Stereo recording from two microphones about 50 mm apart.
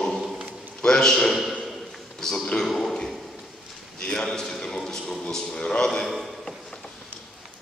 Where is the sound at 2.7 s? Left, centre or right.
Centre.